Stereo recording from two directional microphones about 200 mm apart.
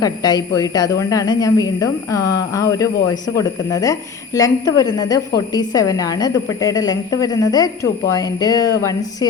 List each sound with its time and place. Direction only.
0.0 s a woman's voice: 20° left (ahead or behind)